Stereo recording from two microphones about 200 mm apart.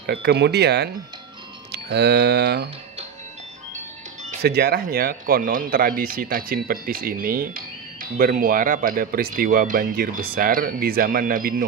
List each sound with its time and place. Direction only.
0.1 s speech: 55° right (ahead or behind)
4.4 s speech: 50° right (ahead or behind)